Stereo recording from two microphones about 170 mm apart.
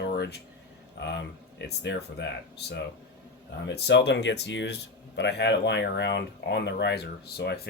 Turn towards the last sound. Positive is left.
turn(degrees=80)